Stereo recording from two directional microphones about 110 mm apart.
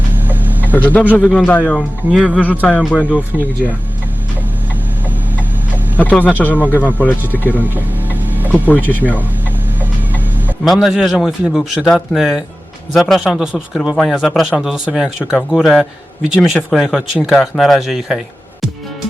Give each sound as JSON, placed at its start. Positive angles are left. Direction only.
{"t": 0.6, "sound": "a sound", "side_deg": 15}
{"t": 1.2, "sound": "speech", "side_deg": 10}
{"t": 6.0, "sound": "speech", "side_deg": 15}
{"t": 6.5, "sound": "speech", "side_deg": -15}
{"t": 6.7, "sound": "speech", "side_deg": 15}
{"t": 7.6, "sound": "a sound", "side_deg": -15}
{"t": 8.5, "sound": "speech", "side_deg": 15}
{"t": 10.6, "sound": "a man's voice", "side_deg": 0}